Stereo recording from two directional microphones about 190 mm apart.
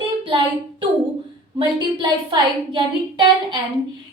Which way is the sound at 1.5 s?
25° right (ahead or behind).